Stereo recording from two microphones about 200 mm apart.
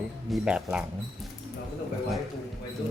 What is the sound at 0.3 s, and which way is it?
Speech, 5° right (ahead or behind).